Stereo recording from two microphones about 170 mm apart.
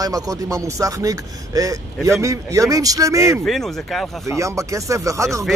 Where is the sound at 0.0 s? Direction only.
20° right (ahead or behind).